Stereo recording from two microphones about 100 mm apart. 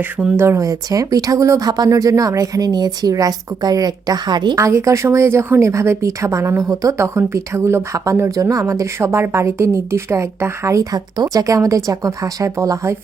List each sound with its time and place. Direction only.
0.3 s speech: 25° right (ahead or behind); by 4.5 s 45° right (ahead or behind)
4.5 s speech: 30° right (ahead or behind)